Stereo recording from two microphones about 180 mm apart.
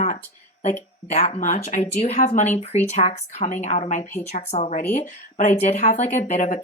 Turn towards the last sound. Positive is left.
turn(degrees=45)  # may be behind; listen again after turning